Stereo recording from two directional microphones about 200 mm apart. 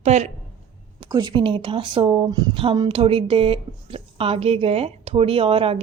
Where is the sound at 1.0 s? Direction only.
20° right (ahead or behind).